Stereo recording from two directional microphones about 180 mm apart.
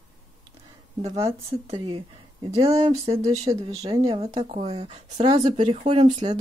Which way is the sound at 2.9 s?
20° right (ahead or behind).